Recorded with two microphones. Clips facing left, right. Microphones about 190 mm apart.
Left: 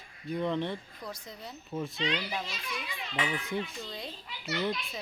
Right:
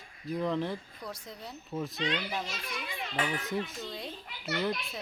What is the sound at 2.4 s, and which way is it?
A child's voice, 45° right (ahead or behind).